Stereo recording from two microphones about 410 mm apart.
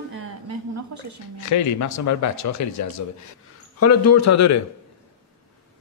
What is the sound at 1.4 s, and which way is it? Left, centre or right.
A man's voice, left.